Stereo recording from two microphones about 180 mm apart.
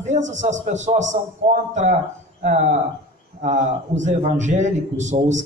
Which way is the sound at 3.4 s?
40° right (ahead or behind).